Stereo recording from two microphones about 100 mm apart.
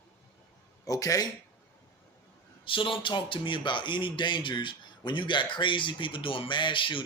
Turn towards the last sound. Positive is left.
turn(degrees=55)  # may be behind; listen again after turning